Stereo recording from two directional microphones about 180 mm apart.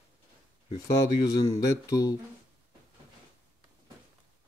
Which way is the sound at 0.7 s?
20° left (ahead or behind).